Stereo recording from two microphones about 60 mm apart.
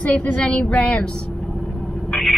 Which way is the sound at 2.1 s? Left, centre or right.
Centre.